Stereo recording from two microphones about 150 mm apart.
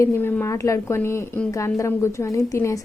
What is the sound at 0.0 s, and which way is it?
A woman's voice, 15° left (ahead or behind).